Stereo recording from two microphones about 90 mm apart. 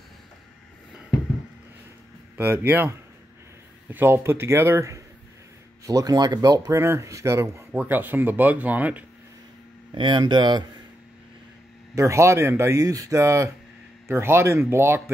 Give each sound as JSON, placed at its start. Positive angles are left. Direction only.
{"t": 2.3, "sound": "speech", "side_deg": -25}
{"t": 6.8, "sound": "speech", "side_deg": -30}
{"t": 7.7, "sound": "speech", "side_deg": -20}
{"t": 9.9, "sound": "speech", "side_deg": -60}
{"t": 11.9, "sound": "speech", "side_deg": -35}